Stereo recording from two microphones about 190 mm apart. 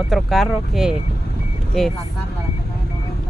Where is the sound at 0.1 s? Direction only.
Centre (ahead or behind).